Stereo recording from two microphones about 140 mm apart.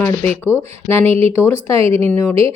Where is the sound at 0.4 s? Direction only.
15° left (ahead or behind).